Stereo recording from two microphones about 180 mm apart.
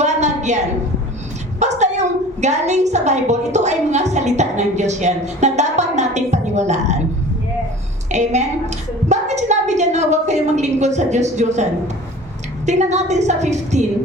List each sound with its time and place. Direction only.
0.0 s a sound: 40° right (ahead or behind)
2.4 s a woman's voice: 40° right (ahead or behind)
8.1 s a woman's voice: 40° right (ahead or behind)
12.6 s a woman's voice: 40° right (ahead or behind)